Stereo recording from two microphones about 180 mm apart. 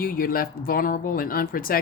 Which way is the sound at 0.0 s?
55° left (ahead or behind).